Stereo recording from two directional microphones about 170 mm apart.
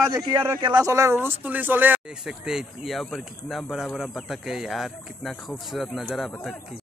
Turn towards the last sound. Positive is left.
turn(degrees=0)  # may be behind; listen again after turning